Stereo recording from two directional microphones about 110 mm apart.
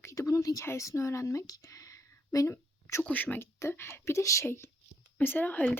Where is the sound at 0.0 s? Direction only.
30° left (ahead or behind).